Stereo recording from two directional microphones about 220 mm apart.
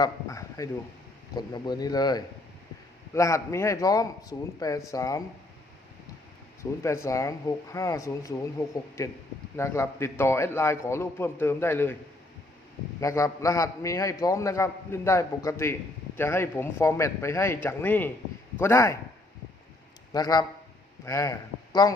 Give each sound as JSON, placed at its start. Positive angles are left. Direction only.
{"t": 0.0, "sound": "a man's voice", "side_deg": 15}
{"t": 6.6, "sound": "a man's voice", "side_deg": 10}
{"t": 13.0, "sound": "a man's voice", "side_deg": 15}
{"t": 20.1, "sound": "a man's voice", "side_deg": 15}